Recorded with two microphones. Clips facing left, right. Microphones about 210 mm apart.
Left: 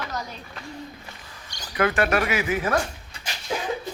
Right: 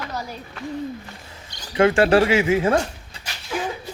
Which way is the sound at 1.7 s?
25° right (ahead or behind).